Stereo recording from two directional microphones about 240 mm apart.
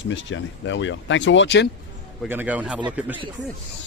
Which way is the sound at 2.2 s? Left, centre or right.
Centre.